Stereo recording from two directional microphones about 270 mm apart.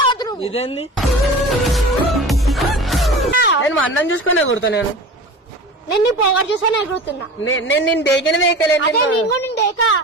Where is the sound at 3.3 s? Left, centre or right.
Left.